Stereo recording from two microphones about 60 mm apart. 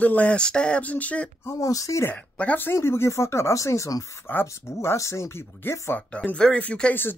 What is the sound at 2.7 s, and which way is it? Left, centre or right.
Speech, left.